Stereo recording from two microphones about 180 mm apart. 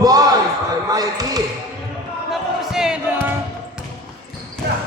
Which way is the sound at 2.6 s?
5° right (ahead or behind).